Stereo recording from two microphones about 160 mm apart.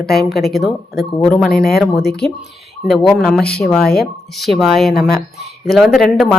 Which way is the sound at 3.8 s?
75° left (ahead or behind).